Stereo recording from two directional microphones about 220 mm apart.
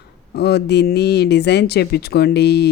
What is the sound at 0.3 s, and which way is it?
A woman's voice, 50° left (ahead or behind).